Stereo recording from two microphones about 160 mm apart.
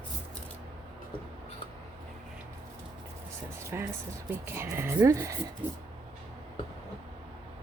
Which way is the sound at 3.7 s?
15° right (ahead or behind).